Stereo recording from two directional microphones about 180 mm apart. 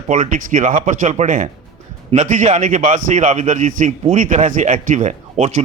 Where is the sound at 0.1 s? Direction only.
45° right (ahead or behind).